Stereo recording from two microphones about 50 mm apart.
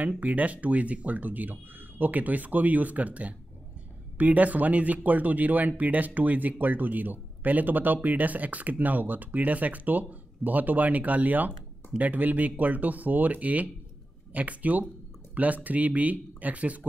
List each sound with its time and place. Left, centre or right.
0.2 s speech: right